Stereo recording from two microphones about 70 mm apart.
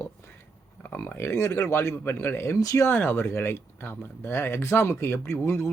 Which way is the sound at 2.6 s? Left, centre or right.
Left.